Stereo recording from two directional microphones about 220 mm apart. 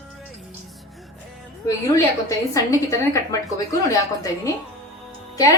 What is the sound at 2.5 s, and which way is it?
A woman's voice, 15° left (ahead or behind).